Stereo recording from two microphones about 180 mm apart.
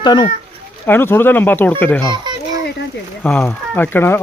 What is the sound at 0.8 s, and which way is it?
Speech, 10° left (ahead or behind).